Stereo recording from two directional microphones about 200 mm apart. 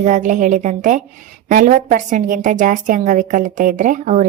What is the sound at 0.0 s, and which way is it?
A woman's voice, 40° right (ahead or behind).